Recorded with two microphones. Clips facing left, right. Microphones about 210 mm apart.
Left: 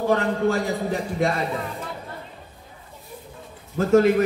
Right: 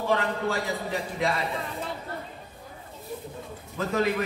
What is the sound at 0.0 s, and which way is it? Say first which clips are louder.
Speech: left 6 dB; 45° left (ahead or behind).